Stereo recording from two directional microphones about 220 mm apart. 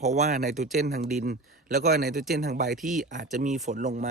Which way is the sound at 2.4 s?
35° right (ahead or behind).